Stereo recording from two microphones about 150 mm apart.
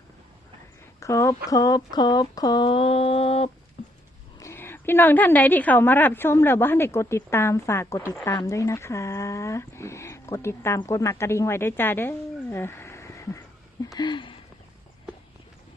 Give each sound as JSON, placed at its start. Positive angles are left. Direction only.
{"t": 0.9, "sound": "speech", "side_deg": 20}
{"t": 2.6, "sound": "mantra", "side_deg": 40}
{"t": 4.4, "sound": "a woman's voice", "side_deg": 15}
{"t": 13.9, "sound": "a sound", "side_deg": 30}